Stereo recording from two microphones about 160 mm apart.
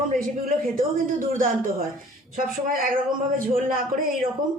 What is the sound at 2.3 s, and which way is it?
Speech, 60° right (ahead or behind).